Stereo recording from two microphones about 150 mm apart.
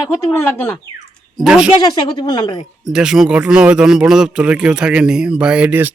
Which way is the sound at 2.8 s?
5° right (ahead or behind).